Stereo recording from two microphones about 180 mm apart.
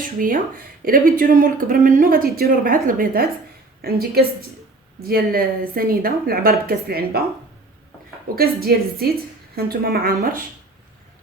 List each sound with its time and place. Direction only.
0.0 s a woman's voice: 50° right (ahead or behind)
8.4 s a woman's voice: 60° right (ahead or behind)